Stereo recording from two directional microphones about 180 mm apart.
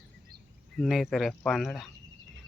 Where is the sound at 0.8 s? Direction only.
Centre (ahead or behind).